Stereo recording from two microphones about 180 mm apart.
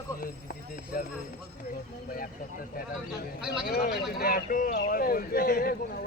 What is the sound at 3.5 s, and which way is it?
Speech, 60° left (ahead or behind).